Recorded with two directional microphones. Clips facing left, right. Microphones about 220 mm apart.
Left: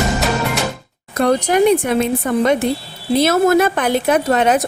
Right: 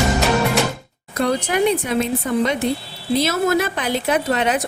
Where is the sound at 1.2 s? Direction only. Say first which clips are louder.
Left 5 dB; 45° left (ahead or behind).